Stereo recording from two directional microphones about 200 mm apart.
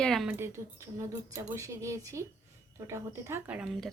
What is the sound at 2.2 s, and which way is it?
Speech, 15° right (ahead or behind).